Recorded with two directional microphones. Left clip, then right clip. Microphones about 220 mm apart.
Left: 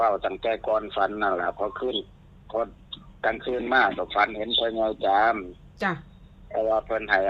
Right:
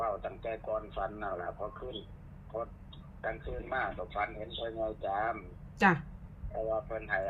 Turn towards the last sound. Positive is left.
turn(degrees=55)  # may be behind; listen again after turning